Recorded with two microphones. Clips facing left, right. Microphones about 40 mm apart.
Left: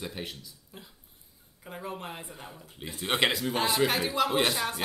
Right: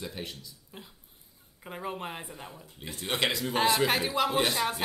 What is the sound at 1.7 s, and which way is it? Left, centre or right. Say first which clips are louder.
Speech: right 2 dB; centre.